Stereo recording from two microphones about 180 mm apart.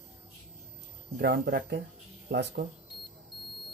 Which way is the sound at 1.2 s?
65° right (ahead or behind).